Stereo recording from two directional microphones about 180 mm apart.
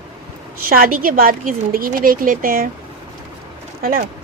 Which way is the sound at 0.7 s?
55° right (ahead or behind).